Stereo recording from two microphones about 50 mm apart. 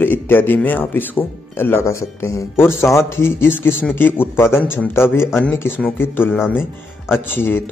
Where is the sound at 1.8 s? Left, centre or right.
Left.